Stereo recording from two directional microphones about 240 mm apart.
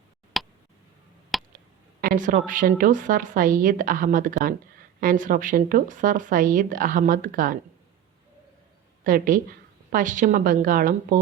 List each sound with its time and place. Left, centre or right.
0.4 s tick: centre
1.3 s a sound: centre
2.0 s speech: right
9.0 s speech: right